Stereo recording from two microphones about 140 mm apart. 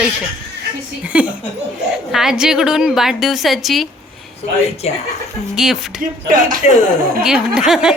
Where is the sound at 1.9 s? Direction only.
5° right (ahead or behind).